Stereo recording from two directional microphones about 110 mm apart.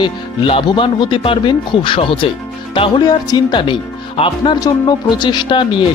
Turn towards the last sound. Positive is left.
turn(degrees=45)  # may be behind; listen again after turning